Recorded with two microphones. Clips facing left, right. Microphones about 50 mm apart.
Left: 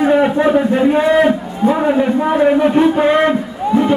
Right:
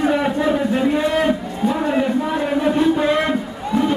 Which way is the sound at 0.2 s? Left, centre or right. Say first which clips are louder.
Left 6 dB; left.